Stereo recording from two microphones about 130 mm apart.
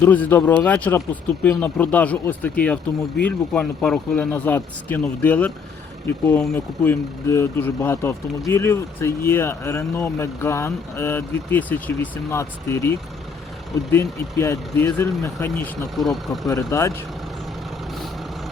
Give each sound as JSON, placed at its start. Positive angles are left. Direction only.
{"t": 0.0, "sound": "speech", "side_deg": 15}
{"t": 13.9, "sound": "speech", "side_deg": 20}
{"t": 16.0, "sound": "speech", "side_deg": 0}
{"t": 16.5, "sound": "speech", "side_deg": 25}